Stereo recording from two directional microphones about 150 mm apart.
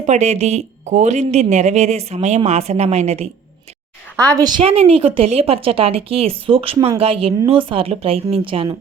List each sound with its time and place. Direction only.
0.0 s speech: 50° right (ahead or behind)
4.2 s a woman's voice: 25° right (ahead or behind)